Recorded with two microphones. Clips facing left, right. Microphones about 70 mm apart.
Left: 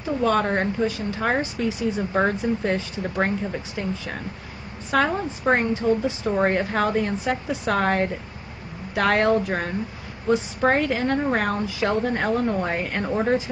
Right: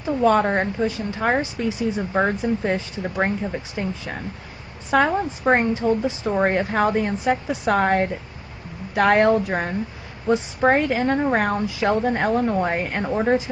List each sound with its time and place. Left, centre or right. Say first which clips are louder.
0.2 s a woman's voice: right 3 dB; centre
1.6 s a woman's voice: right 1 dB; centre
4.9 s a woman's voice: right 3 dB; centre
6.3 s a woman's voice: right 2 dB; centre
12.0 s a woman's voice: right 2 dB; centre